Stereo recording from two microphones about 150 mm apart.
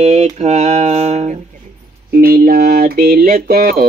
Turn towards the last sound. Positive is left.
turn(degrees=-90)